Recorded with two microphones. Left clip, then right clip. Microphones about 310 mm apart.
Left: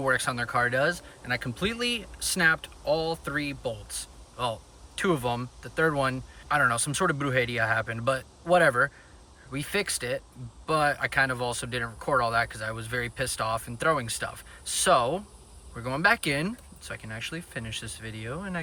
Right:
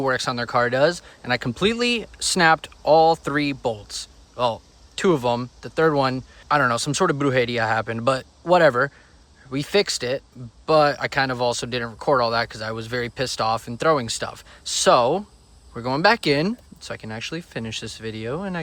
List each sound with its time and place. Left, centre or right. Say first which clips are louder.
0.0 s speech: right 4 dB; centre